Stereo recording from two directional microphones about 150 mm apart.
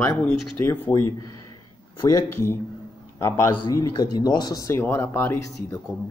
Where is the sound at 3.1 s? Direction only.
20° left (ahead or behind).